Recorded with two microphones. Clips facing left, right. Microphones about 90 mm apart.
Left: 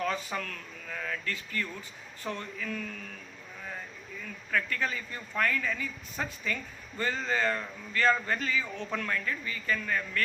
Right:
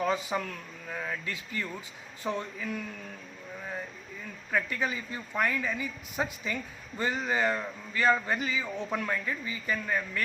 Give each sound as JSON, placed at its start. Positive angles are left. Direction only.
{"t": 0.0, "sound": "a woman's voice", "side_deg": -15}
{"t": 4.5, "sound": "a woman's voice", "side_deg": -15}